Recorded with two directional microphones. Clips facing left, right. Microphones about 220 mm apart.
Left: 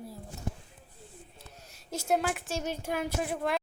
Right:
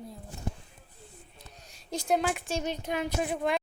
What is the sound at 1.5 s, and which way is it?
A woman's voice, 5° left (ahead or behind).